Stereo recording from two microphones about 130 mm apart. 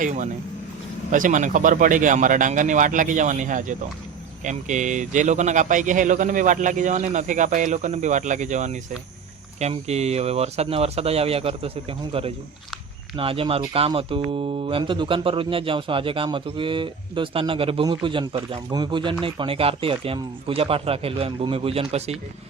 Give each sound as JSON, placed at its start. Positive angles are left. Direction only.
{"t": 0.0, "sound": "speech", "side_deg": -75}
{"t": 9.6, "sound": "speech", "side_deg": -55}